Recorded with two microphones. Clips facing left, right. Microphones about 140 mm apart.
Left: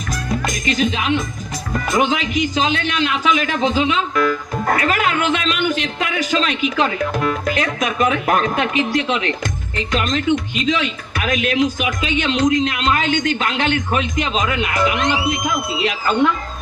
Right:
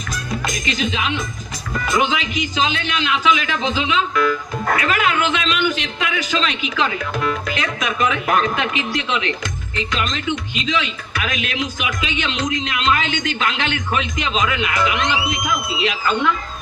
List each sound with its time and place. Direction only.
0.1 s music: 45° left (ahead or behind)
1.7 s a man's voice: 40° left (ahead or behind)